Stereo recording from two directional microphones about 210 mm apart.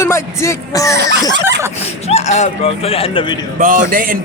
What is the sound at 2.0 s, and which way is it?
Speech, 30° left (ahead or behind).